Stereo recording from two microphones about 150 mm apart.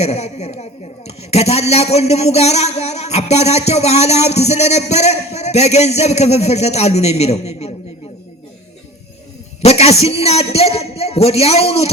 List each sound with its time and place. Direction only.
0.0 s a woman's voice: 45° left (ahead or behind)
9.6 s a man's voice: 45° left (ahead or behind)